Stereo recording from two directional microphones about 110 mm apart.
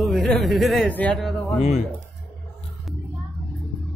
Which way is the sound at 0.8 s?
10° left (ahead or behind).